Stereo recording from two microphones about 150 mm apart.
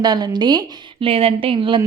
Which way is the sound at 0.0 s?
25° right (ahead or behind).